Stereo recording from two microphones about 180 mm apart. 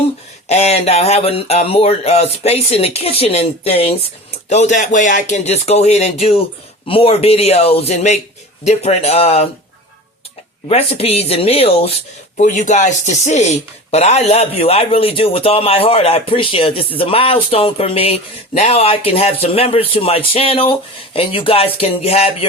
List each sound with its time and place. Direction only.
0.4 s speech: 35° left (ahead or behind)
10.7 s speech: 35° left (ahead or behind)